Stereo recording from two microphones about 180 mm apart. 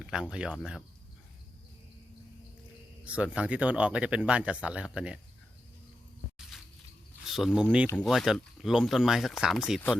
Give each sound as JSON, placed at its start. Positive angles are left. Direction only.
{"t": 0.0, "sound": "speech", "side_deg": -5}
{"t": 3.0, "sound": "speech", "side_deg": -5}
{"t": 7.3, "sound": "speech", "side_deg": 0}
{"t": 7.9, "sound": "speech", "side_deg": 5}